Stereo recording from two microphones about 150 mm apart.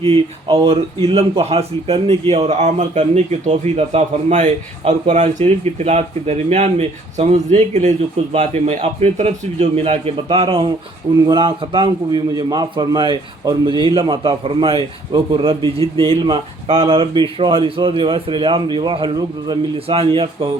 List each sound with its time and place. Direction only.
0.0 s a man's voice: 40° right (ahead or behind)